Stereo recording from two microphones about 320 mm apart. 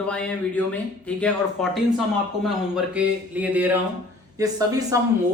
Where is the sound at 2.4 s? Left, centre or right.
Centre.